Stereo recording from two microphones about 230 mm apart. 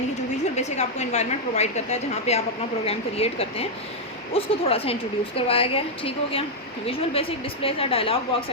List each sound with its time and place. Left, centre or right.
0.5 s a woman's voice: left